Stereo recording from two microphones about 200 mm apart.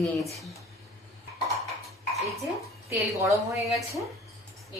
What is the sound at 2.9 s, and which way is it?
Speech, 15° right (ahead or behind).